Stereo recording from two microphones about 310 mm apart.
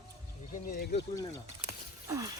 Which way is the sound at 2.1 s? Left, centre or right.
Centre.